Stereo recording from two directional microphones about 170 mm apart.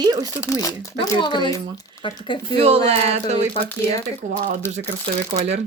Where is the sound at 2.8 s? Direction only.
35° right (ahead or behind).